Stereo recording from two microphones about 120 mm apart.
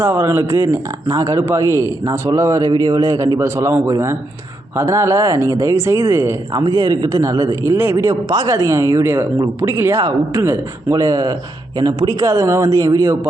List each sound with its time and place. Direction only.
0.0 s speech: 25° right (ahead or behind)
6.6 s speech: 35° right (ahead or behind)